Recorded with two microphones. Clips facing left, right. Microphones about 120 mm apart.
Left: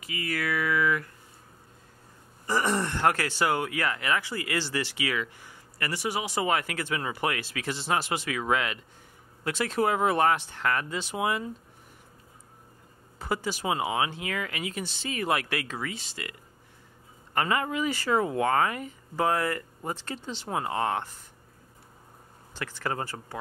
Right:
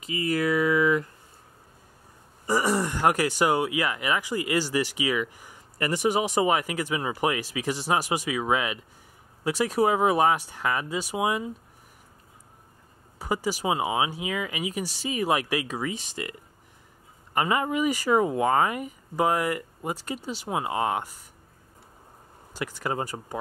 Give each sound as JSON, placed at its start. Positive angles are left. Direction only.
{"t": 0.0, "sound": "speech", "side_deg": -25}
{"t": 2.4, "sound": "speech", "side_deg": -10}
{"t": 13.2, "sound": "speech", "side_deg": -10}
{"t": 22.5, "sound": "speech", "side_deg": -15}